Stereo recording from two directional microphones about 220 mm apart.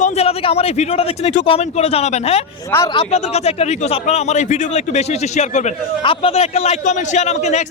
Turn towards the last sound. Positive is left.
turn(degrees=30)  # may be behind; listen again after turning